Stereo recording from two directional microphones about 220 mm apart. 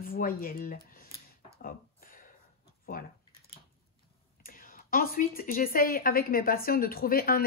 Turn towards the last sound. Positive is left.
turn(degrees=40)  # may be behind; listen again after turning